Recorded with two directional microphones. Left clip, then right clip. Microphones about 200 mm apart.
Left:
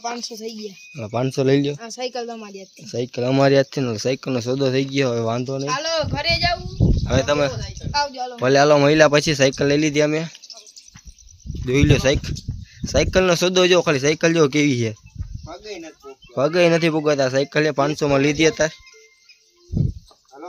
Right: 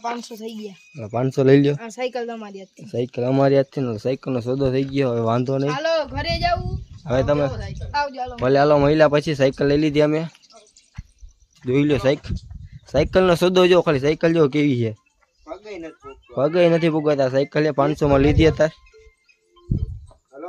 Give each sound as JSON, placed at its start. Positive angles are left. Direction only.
{"t": 0.0, "sound": "speech", "side_deg": -5}
{"t": 5.3, "sound": "speech", "side_deg": -25}
{"t": 5.8, "sound": "speech", "side_deg": 55}
{"t": 6.2, "sound": "speech", "side_deg": 40}
{"t": 7.0, "sound": "speech", "side_deg": -5}
{"t": 11.6, "sound": "speech", "side_deg": 0}
{"t": 16.3, "sound": "speech", "side_deg": 0}